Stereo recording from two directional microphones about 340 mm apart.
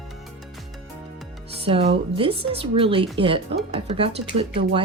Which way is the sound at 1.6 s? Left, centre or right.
Centre.